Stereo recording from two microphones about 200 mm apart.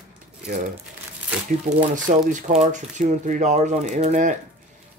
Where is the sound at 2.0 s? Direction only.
40° right (ahead or behind).